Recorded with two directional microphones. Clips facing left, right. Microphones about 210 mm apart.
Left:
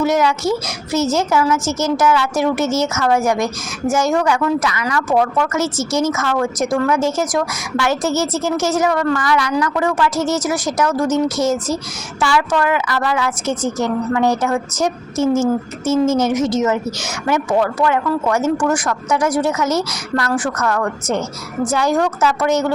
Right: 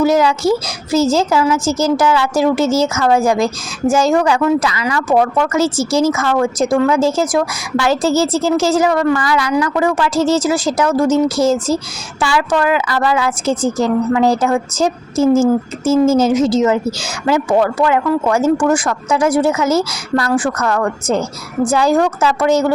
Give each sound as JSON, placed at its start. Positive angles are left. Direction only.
{"t": 0.0, "sound": "a woman's voice", "side_deg": -30}